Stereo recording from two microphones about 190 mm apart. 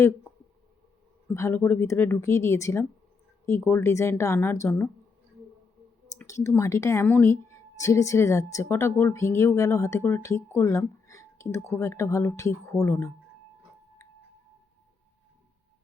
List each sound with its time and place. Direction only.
1.3 s speech: 15° left (ahead or behind)
6.1 s speech: 15° left (ahead or behind)